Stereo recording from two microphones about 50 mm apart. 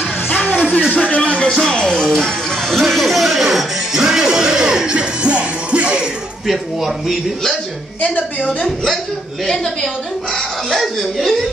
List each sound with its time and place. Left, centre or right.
0.5 s music: left
0.9 s speech: left
1.6 s speech: centre
2.0 s music: centre
2.8 s speech: centre; by 6.0 s right
6.4 s speech: centre
8.6 s speech: centre
10.3 s speech: centre